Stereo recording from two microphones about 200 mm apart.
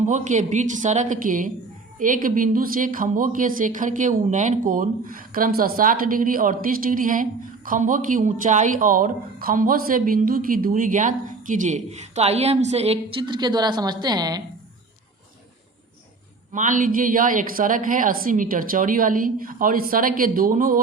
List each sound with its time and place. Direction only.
0.0 s speech: 35° right (ahead or behind); by 14.4 s 20° right (ahead or behind)
16.5 s a woman's voice: 40° right (ahead or behind)